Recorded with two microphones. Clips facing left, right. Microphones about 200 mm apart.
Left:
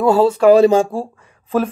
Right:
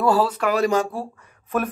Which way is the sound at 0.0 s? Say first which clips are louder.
Left 8 dB; 25° left (ahead or behind).